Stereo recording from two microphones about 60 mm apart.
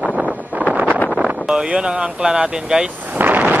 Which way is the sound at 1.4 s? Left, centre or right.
Centre.